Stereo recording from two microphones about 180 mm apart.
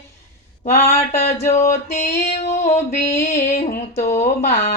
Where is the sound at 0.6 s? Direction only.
35° left (ahead or behind).